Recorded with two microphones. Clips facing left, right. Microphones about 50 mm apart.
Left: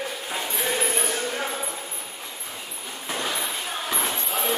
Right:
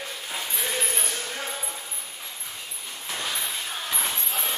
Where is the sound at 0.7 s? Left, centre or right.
Centre.